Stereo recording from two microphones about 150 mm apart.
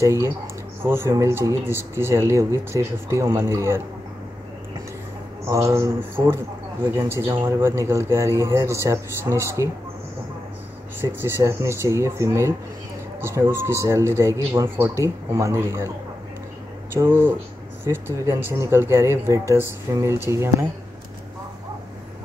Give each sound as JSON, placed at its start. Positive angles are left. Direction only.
{"t": 0.0, "sound": "speech", "side_deg": -20}
{"t": 5.4, "sound": "speech", "side_deg": -20}
{"t": 11.0, "sound": "speech", "side_deg": -15}
{"t": 16.9, "sound": "speech", "side_deg": -15}